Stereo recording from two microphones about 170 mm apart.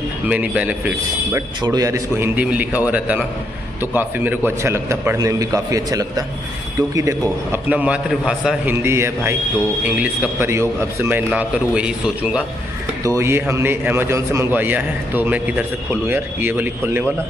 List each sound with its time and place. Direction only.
0.3 s a man's voice: 10° right (ahead or behind)
1.6 s a man's voice: 20° right (ahead or behind)
3.8 s a man's voice: 10° right (ahead or behind)
8.8 s a man's voice: 15° right (ahead or behind)